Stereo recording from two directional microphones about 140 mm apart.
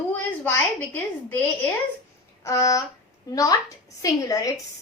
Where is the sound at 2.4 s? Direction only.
20° left (ahead or behind).